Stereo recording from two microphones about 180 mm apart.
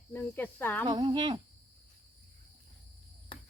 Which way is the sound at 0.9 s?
25° right (ahead or behind).